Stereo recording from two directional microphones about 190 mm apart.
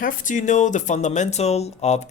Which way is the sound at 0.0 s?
45° left (ahead or behind).